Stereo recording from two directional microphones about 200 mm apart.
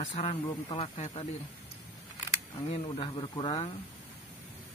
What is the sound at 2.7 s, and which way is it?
Speech, 25° left (ahead or behind).